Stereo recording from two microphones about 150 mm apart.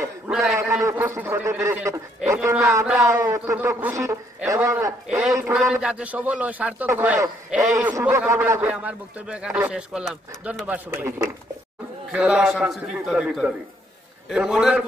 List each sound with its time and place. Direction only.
0.3 s a sound: centre (ahead or behind)
0.6 s a man's voice: 20° right (ahead or behind)
2.4 s a man's voice: 10° right (ahead or behind)
5.0 s a man's voice: 5° right (ahead or behind)
7.7 s a man's voice: 20° right (ahead or behind)
8.0 s a man's voice: 10° right (ahead or behind)